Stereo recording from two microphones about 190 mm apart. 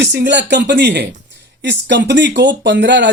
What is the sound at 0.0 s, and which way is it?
Speech, 60° right (ahead or behind).